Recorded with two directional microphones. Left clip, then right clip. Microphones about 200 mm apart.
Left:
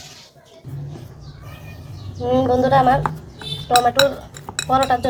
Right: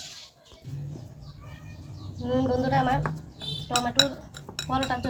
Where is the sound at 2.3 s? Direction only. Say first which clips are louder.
Left 9 dB; 25° left (ahead or behind).